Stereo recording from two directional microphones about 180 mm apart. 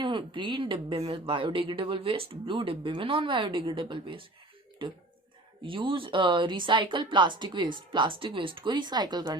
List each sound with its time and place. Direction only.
0.0 s speech: 25° right (ahead or behind)
5.6 s speech: 30° right (ahead or behind)